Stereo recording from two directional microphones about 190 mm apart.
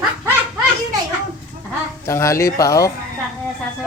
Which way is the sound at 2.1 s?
15° left (ahead or behind).